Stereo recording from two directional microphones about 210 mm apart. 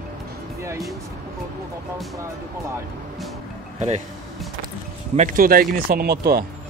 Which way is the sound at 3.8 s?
30° right (ahead or behind).